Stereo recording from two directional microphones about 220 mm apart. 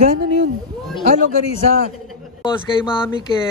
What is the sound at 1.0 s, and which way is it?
Speech, 35° right (ahead or behind).